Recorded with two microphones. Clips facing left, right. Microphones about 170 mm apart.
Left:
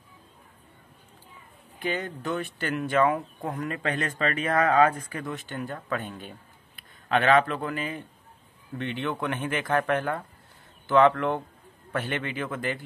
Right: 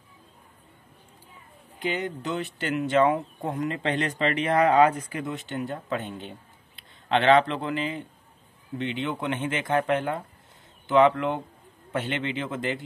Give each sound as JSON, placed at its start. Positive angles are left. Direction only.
{"t": 1.8, "sound": "speech", "side_deg": -20}